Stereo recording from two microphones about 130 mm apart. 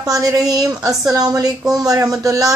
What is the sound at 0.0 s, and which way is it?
Speech, 30° right (ahead or behind).